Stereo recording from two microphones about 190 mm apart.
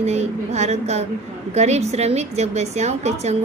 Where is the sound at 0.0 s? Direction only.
35° right (ahead or behind).